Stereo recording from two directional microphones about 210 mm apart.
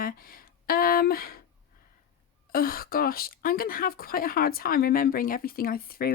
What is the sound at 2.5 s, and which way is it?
Speech, 45° left (ahead or behind).